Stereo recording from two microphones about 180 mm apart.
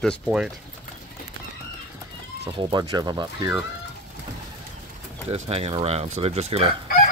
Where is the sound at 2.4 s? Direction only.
25° right (ahead or behind).